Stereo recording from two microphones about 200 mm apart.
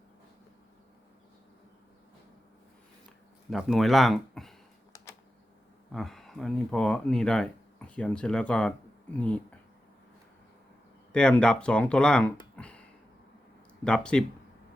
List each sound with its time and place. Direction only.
3.5 s speech: centre (ahead or behind)
5.9 s speech: centre (ahead or behind)
11.1 s speech: 5° left (ahead or behind)
12.5 s a sound: 5° left (ahead or behind)
13.8 s speech: 5° left (ahead or behind)